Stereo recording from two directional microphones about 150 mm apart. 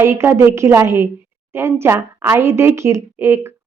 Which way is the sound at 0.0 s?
15° right (ahead or behind).